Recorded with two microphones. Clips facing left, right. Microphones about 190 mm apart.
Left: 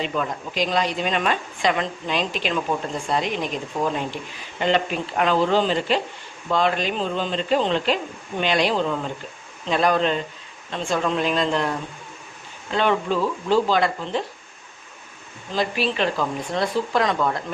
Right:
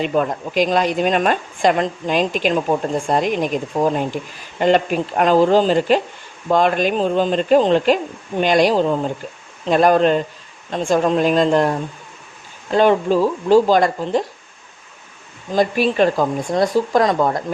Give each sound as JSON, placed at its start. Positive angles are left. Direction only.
{"t": 0.0, "sound": "a woman's voice", "side_deg": -50}
{"t": 15.5, "sound": "a woman's voice", "side_deg": -45}